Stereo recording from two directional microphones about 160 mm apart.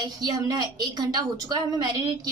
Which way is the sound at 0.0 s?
25° right (ahead or behind).